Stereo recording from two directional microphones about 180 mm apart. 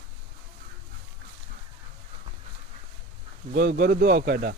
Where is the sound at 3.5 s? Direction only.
60° right (ahead or behind).